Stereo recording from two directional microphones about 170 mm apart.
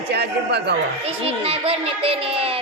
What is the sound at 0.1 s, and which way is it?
Speech, 80° right.